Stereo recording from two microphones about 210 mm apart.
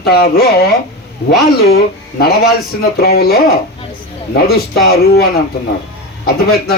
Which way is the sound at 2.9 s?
45° left (ahead or behind).